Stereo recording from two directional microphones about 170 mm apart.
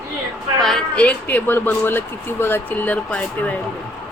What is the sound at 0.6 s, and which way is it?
Speech, 5° left (ahead or behind).